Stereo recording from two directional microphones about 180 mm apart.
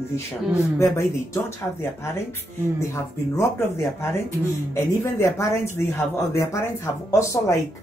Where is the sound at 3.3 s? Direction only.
15° left (ahead or behind).